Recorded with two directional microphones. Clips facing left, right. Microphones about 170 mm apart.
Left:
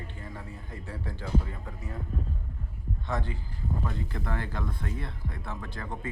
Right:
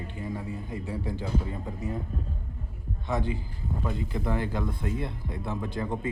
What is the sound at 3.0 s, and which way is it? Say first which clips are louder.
Speech: right 5 dB; 15° right (ahead or behind).